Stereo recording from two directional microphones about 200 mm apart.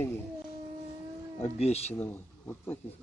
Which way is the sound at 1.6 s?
30° left (ahead or behind).